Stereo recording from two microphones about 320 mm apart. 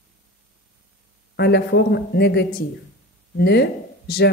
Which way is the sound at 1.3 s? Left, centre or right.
Left.